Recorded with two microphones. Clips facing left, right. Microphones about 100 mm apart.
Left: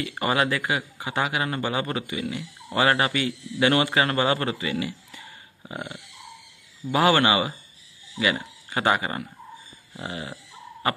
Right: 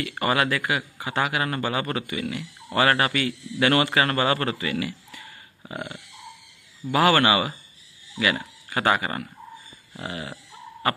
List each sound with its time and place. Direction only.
0.2 s a man's voice: 20° left (ahead or behind)